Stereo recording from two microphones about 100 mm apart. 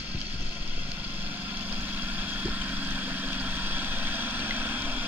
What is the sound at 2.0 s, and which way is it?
Vehicle, 20° right (ahead or behind).